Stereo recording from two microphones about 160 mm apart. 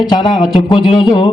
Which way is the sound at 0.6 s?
30° left (ahead or behind).